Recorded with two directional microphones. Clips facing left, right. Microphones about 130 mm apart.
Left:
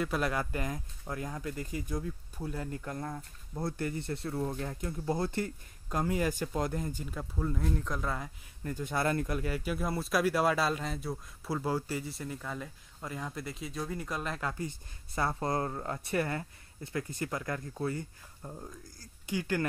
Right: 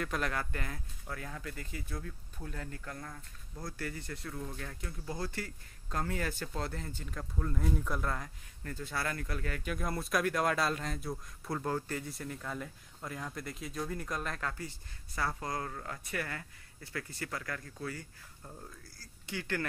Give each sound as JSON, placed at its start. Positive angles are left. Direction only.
{"t": 0.0, "sound": "speech", "side_deg": 10}
{"t": 7.6, "sound": "speech", "side_deg": -5}
{"t": 8.6, "sound": "speech", "side_deg": 15}
{"t": 14.5, "sound": "speech", "side_deg": 20}